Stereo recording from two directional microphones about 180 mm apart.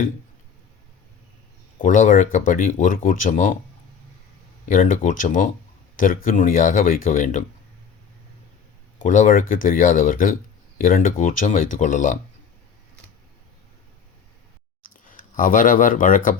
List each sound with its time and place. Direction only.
1.8 s speech: 45° left (ahead or behind)
4.6 s speech: 50° left (ahead or behind)
9.0 s speech: 45° left (ahead or behind)
15.1 s speech: 50° left (ahead or behind)